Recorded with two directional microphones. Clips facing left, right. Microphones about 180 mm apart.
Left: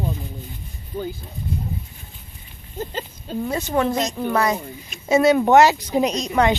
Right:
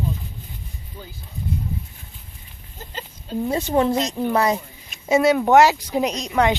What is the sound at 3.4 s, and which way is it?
Speech, 30° right (ahead or behind).